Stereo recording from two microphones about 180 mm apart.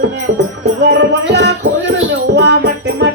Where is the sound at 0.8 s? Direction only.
70° right (ahead or behind).